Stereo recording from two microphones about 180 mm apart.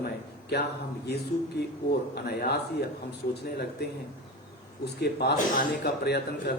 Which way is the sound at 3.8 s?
65° left (ahead or behind).